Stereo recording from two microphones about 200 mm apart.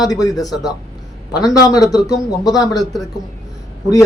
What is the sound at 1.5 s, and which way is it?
A man's voice, 15° left (ahead or behind).